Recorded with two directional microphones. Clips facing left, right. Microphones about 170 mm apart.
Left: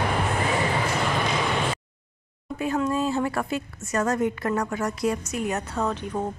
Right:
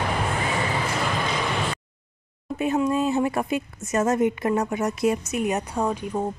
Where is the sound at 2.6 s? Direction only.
20° right (ahead or behind).